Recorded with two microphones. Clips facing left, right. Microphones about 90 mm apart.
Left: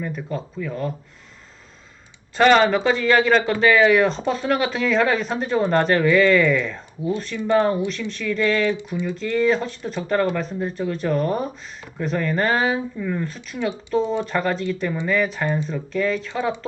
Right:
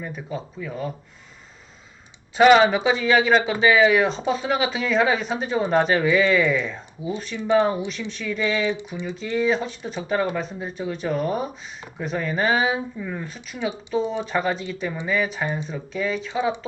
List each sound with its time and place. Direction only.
0.0 s speech: 10° right (ahead or behind)
2.3 s speech: 5° right (ahead or behind)